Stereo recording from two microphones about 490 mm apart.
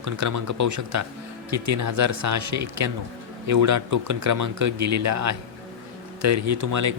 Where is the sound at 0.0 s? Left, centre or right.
Right.